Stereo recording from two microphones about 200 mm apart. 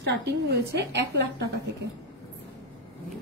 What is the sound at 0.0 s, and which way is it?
A woman's voice, 60° right (ahead or behind).